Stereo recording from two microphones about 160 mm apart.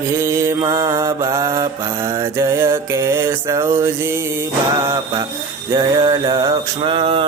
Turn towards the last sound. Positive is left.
turn(degrees=-35)  # may be behind; listen again after turning